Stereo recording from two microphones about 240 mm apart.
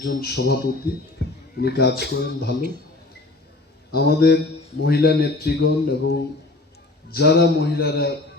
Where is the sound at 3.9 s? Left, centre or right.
Left.